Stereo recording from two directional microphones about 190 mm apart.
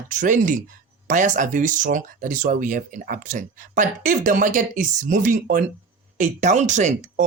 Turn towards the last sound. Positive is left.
turn(degrees=-40)  # may be behind; listen again after turning